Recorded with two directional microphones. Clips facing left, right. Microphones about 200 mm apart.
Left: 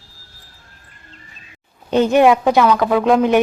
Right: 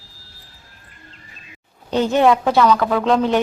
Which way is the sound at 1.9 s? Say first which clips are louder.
Left 3 dB; 15° left (ahead or behind).